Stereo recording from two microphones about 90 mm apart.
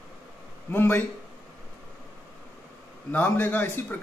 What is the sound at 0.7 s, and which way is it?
Speech, 25° left (ahead or behind).